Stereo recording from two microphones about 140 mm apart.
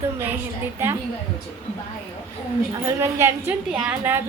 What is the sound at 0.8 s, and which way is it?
Speech, 15° right (ahead or behind).